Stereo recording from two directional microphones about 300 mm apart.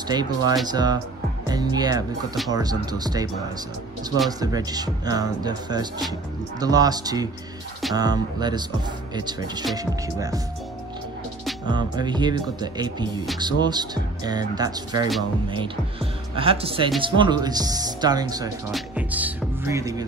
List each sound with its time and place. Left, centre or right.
0.1 s speech: centre
4.3 s speech: centre
11.6 s speech: centre